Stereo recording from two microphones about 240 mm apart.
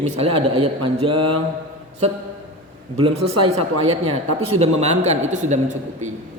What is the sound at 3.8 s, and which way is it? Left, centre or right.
A man's voice, right.